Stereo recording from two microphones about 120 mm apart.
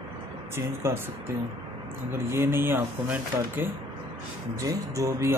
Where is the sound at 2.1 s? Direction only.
20° right (ahead or behind).